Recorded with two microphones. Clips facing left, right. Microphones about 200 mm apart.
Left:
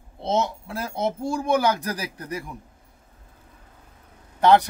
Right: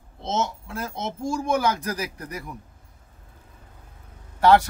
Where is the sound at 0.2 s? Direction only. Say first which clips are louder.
Left 3 dB; 35° left (ahead or behind).